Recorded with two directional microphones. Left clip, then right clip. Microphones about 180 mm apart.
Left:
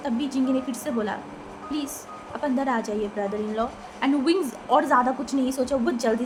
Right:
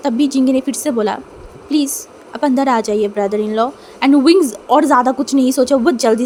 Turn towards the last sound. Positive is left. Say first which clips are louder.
# right 11 dB
turn(degrees=-55)  # may be behind; listen again after turning